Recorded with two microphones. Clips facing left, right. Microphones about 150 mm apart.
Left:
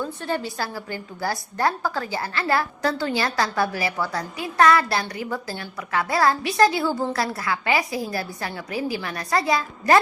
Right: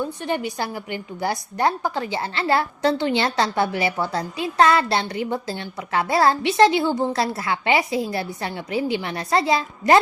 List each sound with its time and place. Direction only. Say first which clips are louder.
0.0 s a woman's voice: right 2 dB; 20° right (ahead or behind)